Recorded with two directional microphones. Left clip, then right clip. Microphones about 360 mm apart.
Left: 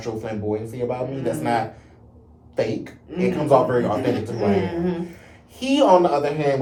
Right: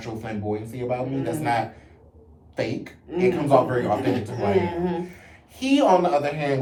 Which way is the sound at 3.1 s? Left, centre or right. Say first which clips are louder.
Left 1 dB; centre.